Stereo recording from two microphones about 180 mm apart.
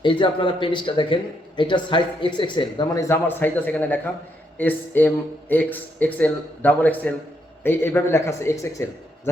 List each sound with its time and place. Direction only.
0.0 s speech: 25° left (ahead or behind)
3.1 s speech: 10° left (ahead or behind)